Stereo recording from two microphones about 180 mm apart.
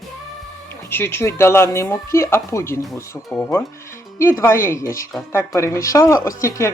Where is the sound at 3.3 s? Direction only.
Centre (ahead or behind).